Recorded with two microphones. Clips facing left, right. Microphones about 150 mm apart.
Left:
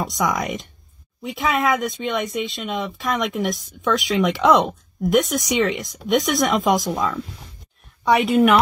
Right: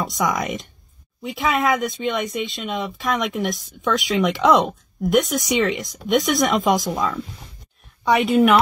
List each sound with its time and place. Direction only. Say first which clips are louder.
0.0 s speech: even; centre (ahead or behind)
8.3 s speech: right 1 dB; centre (ahead or behind)